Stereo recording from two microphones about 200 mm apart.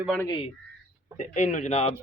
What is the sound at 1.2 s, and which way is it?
Speech, 35° left (ahead or behind).